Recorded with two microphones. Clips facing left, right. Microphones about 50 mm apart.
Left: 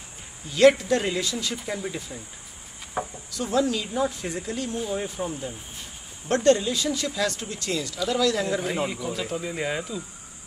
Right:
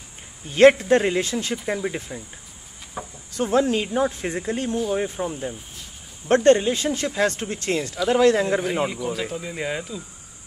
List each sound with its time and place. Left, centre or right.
0.5 s speech: right
3.3 s speech: right
8.8 s speech: centre